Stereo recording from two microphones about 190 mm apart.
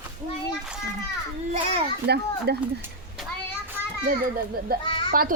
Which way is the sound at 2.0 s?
60° right (ahead or behind).